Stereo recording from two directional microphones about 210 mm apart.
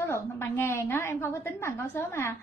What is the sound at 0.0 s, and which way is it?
A woman's voice, 10° left (ahead or behind).